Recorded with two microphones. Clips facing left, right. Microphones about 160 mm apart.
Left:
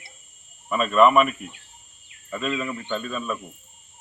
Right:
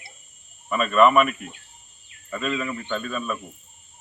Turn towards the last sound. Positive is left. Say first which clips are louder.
# even
turn(degrees=0)  # may be behind; listen again after turning